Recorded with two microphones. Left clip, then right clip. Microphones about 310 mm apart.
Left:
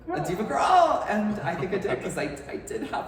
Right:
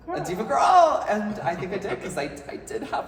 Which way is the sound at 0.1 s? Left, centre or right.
Centre.